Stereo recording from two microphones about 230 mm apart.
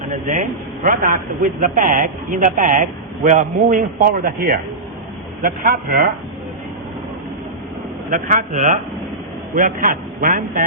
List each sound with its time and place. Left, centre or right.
0.1 s a man's voice: right
8.1 s a man's voice: right